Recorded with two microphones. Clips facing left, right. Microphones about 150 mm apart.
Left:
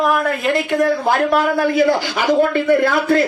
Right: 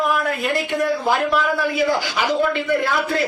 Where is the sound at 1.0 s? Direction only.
50° left (ahead or behind).